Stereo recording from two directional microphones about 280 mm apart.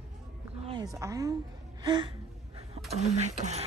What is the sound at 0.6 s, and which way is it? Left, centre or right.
Speech, centre.